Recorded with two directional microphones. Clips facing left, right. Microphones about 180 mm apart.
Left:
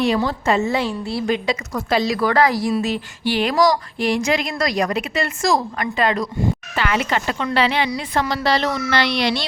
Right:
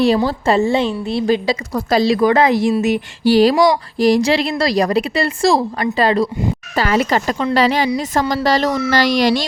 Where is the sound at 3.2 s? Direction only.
35° right (ahead or behind).